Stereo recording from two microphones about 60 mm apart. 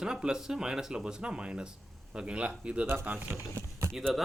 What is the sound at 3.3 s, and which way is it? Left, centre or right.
Speech, right.